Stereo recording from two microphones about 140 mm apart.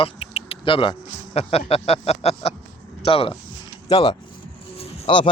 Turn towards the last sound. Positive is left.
turn(degrees=40)  # may be behind; listen again after turning